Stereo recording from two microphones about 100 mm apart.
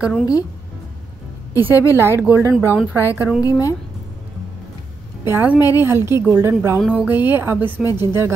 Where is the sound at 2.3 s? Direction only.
35° left (ahead or behind).